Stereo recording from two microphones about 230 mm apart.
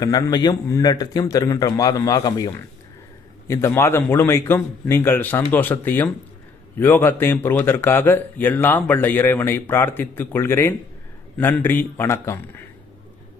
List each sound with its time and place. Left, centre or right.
0.0 s speech: centre